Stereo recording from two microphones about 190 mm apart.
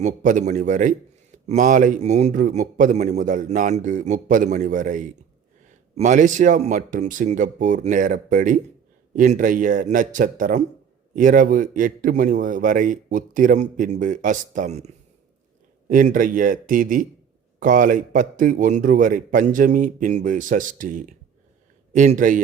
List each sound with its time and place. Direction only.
0.0 s a man's voice: 45° right (ahead or behind)
15.9 s a man's voice: 45° right (ahead or behind)